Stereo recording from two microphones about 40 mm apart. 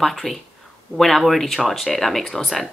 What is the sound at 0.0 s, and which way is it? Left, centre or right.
Speech, centre.